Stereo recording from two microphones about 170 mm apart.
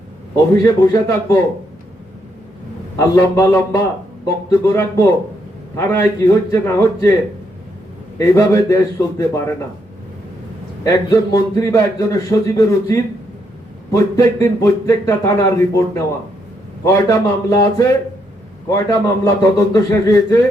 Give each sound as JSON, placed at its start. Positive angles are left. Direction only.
{"t": 0.5, "sound": "a man's voice", "side_deg": 20}
{"t": 3.0, "sound": "a man's voice", "side_deg": 20}
{"t": 8.2, "sound": "a man's voice", "side_deg": 20}
{"t": 10.8, "sound": "a man's voice", "side_deg": 20}